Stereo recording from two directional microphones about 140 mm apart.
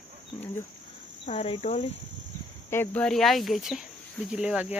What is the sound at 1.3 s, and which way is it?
Speech, 50° left (ahead or behind).